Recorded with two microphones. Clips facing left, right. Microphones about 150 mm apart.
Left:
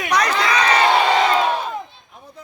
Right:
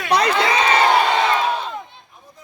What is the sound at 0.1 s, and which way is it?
Crowd, 25° right (ahead or behind).